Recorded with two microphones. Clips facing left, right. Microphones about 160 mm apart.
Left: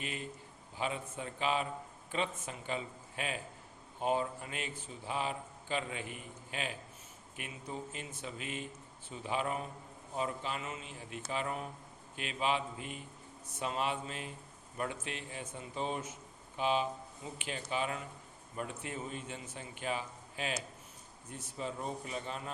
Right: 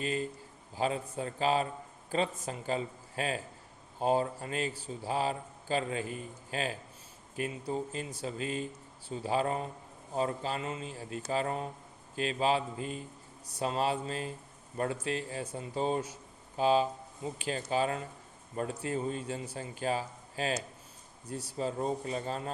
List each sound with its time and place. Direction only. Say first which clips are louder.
0.0 s a man's voice: right 8 dB; 35° right (ahead or behind)